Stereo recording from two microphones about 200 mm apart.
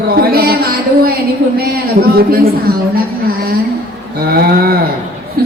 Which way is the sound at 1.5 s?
50° right (ahead or behind).